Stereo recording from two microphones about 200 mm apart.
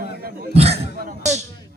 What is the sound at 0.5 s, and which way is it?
Speech, 30° right (ahead or behind).